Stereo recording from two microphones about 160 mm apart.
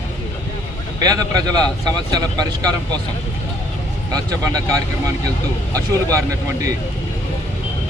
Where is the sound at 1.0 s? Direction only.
25° right (ahead or behind).